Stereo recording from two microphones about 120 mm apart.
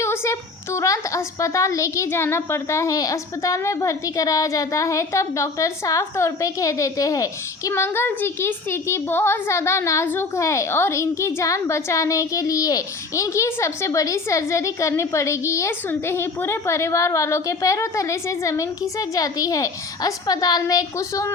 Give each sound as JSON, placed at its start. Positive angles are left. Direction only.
{"t": 0.0, "sound": "speech", "side_deg": 20}
{"t": 7.7, "sound": "speech", "side_deg": 20}